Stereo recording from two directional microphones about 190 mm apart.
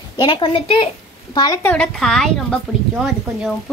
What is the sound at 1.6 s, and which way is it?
Speech, 5° left (ahead or behind).